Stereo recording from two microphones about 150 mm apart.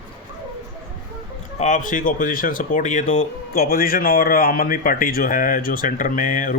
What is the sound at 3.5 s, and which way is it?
A man's voice, 85° left.